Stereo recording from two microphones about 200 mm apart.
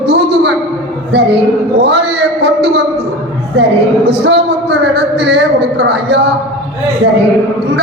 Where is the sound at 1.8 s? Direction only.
55° right (ahead or behind).